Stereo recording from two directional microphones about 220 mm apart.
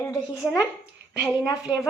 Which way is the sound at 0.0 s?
15° left (ahead or behind).